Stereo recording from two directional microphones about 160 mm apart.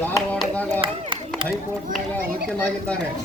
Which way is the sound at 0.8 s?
30° right (ahead or behind).